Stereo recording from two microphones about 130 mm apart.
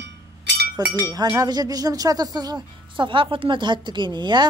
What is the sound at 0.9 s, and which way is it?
Speech, 30° right (ahead or behind).